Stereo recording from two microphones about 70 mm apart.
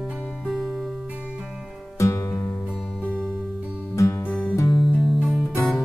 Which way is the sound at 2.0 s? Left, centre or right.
Left.